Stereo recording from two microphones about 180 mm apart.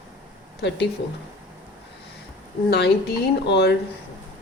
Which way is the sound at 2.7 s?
65° left (ahead or behind).